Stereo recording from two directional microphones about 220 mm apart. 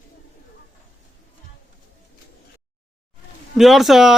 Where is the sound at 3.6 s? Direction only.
Centre (ahead or behind).